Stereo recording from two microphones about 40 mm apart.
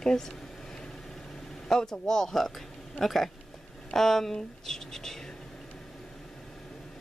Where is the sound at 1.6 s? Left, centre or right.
Centre.